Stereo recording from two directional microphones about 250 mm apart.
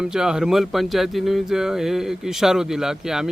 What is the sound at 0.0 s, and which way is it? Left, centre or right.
Speech, centre.